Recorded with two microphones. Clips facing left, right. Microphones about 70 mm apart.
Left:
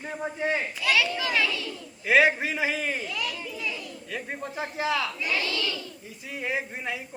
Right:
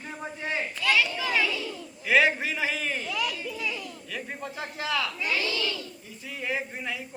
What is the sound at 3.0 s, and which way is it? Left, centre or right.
Speech, centre.